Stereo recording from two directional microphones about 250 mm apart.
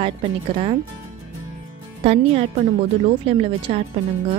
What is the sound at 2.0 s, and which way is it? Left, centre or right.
A woman's voice, right.